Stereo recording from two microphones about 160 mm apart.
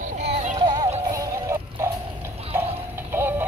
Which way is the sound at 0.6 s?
30° right (ahead or behind).